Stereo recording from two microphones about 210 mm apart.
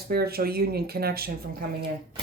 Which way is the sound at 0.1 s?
45° right (ahead or behind).